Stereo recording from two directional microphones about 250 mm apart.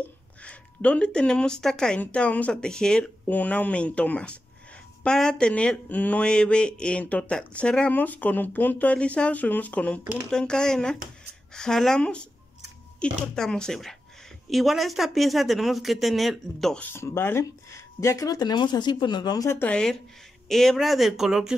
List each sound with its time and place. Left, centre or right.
0.0 s speech: centre